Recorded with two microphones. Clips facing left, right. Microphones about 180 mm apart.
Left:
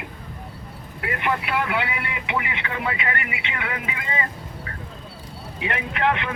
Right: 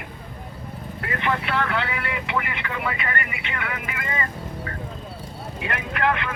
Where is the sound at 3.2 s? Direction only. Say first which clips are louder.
Even; 45° right (ahead or behind).